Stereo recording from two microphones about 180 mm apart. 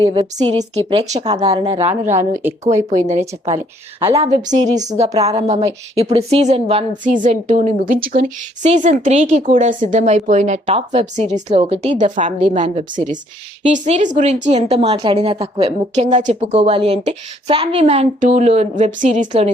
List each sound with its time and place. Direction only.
0.0 s a woman's voice: 30° right (ahead or behind)
2.1 s speech: 15° right (ahead or behind)
3.1 s speech: 35° right (ahead or behind)
8.6 s speech: 40° right (ahead or behind)